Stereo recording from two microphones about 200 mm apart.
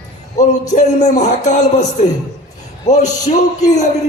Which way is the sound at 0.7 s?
35° left (ahead or behind).